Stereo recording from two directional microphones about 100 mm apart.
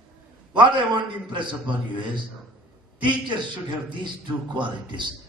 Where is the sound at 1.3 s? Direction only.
50° right (ahead or behind).